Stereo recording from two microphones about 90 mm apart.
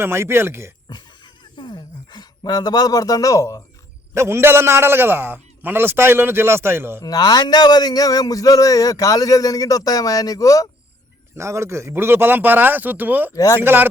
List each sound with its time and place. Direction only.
0.0 s a man's voice: 30° right (ahead or behind)
0.9 s a sound: 55° left (ahead or behind); by 3.6 s 35° left (ahead or behind)
4.1 s a man's voice: 30° right (ahead or behind)
7.0 s a man's voice: 45° left (ahead or behind)
11.3 s a man's voice: 35° right (ahead or behind)
13.3 s a man's voice: 40° left (ahead or behind)
13.6 s a man's voice: 20° right (ahead or behind)